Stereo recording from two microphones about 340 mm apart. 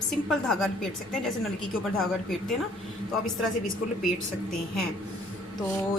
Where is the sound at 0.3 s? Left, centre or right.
Centre.